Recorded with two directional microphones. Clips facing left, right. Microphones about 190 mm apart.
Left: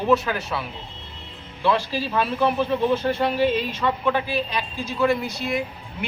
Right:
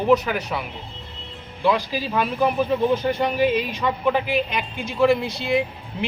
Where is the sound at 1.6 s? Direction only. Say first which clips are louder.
Right 1 dB; 10° right (ahead or behind).